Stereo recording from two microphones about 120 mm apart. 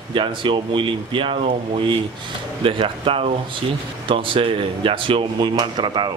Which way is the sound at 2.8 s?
50° right (ahead or behind).